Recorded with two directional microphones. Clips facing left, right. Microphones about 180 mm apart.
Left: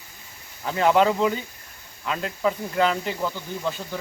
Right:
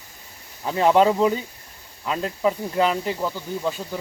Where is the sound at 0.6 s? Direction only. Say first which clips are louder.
Right 2 dB; 15° right (ahead or behind).